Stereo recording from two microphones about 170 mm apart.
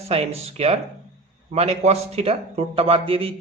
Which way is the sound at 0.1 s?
40° right (ahead or behind).